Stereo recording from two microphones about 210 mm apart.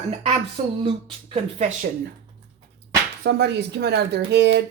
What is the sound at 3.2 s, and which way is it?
Speech, 50° right (ahead or behind).